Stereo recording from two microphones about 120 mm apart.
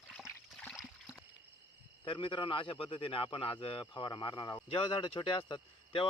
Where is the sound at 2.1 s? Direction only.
45° left (ahead or behind).